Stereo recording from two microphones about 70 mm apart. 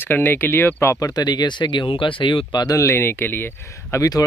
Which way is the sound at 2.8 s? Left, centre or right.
Left.